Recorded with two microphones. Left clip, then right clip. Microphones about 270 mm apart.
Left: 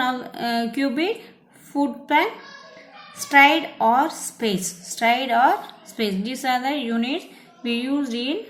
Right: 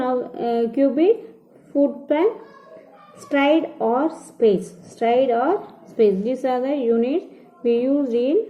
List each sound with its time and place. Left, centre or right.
0.0 s a woman's voice: left